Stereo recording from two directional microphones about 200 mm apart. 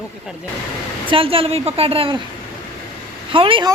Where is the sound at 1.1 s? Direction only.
25° right (ahead or behind).